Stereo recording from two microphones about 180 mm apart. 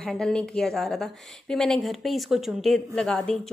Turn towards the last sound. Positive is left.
turn(degrees=5)  # may be behind; listen again after turning